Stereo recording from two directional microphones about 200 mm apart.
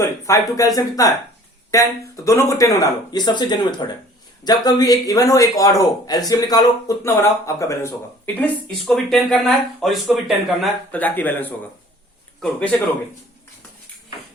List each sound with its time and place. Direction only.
0.0 s a man's voice: 15° left (ahead or behind)
8.4 s speech: 5° left (ahead or behind)